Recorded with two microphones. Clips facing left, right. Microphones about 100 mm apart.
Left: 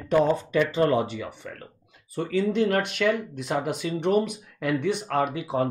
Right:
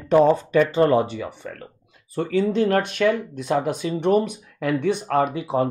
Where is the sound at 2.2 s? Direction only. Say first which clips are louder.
Right 4 dB; 45° right (ahead or behind).